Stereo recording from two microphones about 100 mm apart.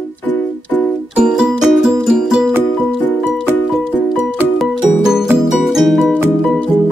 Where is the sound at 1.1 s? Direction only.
5° right (ahead or behind).